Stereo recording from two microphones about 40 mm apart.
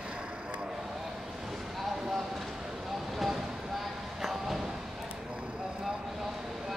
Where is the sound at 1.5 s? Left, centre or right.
Centre.